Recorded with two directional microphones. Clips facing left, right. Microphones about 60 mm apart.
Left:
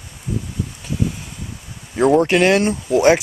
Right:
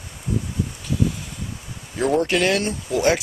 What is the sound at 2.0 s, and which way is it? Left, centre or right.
Speech, left.